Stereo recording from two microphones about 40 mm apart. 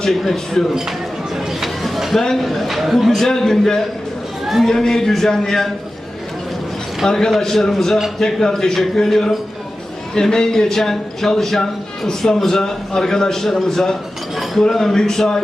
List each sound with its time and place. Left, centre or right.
0.6 s speech: centre
1.6 s a sound: centre
2.4 s speech: centre
3.2 s a man's voice: centre
4.4 s a man's voice: centre
4.7 s a man's voice: centre
7.0 s a man's voice: centre